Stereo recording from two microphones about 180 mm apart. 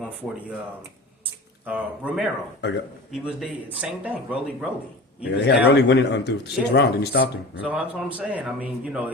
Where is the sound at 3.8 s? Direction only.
10° right (ahead or behind).